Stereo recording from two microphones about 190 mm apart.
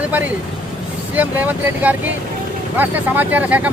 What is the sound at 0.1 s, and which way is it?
Speech, 10° right (ahead or behind).